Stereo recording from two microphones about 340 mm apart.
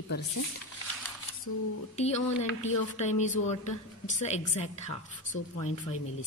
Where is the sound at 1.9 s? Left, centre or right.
Centre.